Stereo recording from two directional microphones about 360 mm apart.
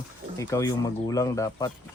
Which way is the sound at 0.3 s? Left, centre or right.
Centre.